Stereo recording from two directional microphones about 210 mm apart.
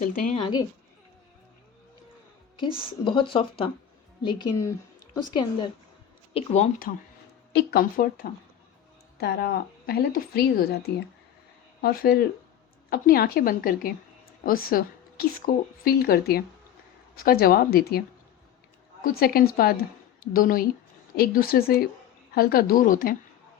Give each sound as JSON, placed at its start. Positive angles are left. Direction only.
{"t": 0.0, "sound": "speech", "side_deg": 40}
{"t": 0.3, "sound": "speech", "side_deg": 20}
{"t": 2.8, "sound": "speech", "side_deg": 25}
{"t": 6.3, "sound": "a woman's voice", "side_deg": 30}
{"t": 19.0, "sound": "a woman's voice", "side_deg": 45}